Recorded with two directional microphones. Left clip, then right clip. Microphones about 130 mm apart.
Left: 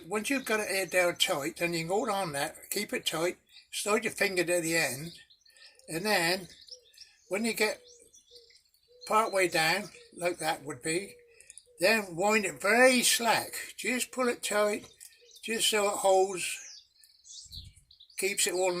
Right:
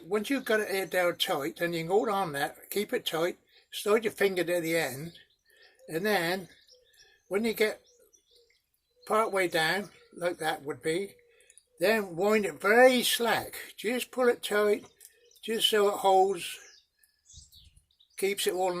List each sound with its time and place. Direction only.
0.1 s speech: 85° right; by 7.8 s 65° right (ahead or behind)
9.0 s speech: 70° right (ahead or behind)
17.6 s bird: 5° right (ahead or behind)
18.1 s speech: 75° right (ahead or behind)
18.5 s speech: 65° right (ahead or behind)